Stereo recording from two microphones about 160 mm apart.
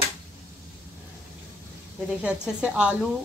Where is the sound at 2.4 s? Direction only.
5° right (ahead or behind).